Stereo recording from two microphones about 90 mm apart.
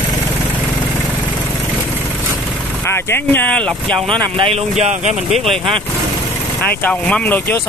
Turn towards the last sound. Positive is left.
turn(degrees=15)  # may be behind; listen again after turning